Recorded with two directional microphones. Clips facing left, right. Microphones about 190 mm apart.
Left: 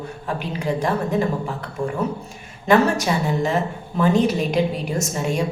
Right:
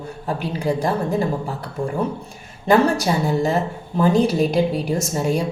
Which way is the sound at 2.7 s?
35° right (ahead or behind).